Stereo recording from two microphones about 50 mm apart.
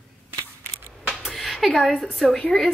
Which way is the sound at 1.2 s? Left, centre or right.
Centre.